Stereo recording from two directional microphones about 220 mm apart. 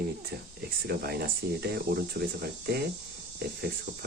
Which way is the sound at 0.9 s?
45° right (ahead or behind).